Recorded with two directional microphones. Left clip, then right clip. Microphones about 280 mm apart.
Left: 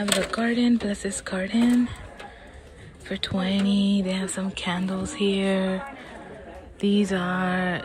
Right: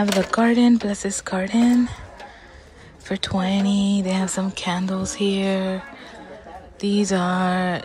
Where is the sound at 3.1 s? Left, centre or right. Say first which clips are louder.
Right 4 dB; centre.